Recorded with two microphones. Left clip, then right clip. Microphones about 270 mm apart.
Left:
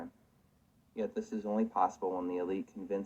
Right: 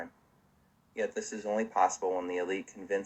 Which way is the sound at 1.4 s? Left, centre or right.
Left.